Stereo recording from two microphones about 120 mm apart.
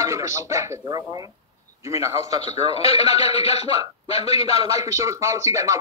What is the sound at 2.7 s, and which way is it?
A man's voice, 60° left (ahead or behind).